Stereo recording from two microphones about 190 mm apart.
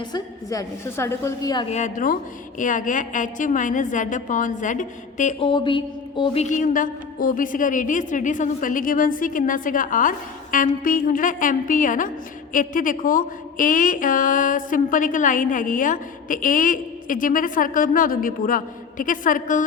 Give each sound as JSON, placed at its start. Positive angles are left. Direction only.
{"t": 0.0, "sound": "a woman's voice", "side_deg": 20}
{"t": 1.7, "sound": "speech", "side_deg": 40}
{"t": 5.5, "sound": "speech", "side_deg": 25}